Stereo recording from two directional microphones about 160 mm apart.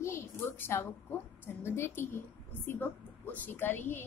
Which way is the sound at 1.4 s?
15° left (ahead or behind).